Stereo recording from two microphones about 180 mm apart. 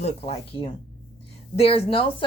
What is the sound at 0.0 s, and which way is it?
A woman's voice, 35° left (ahead or behind).